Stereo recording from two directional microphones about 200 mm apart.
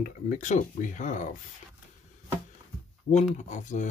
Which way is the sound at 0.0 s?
40° left (ahead or behind).